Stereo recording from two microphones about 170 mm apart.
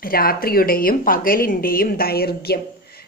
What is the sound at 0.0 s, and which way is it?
Speech, 60° left (ahead or behind).